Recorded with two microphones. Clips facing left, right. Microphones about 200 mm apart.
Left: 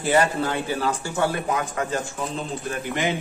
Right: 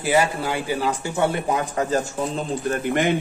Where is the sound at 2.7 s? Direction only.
55° right (ahead or behind).